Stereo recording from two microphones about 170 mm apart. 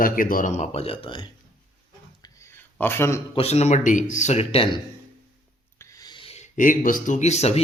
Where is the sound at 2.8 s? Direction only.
15° left (ahead or behind).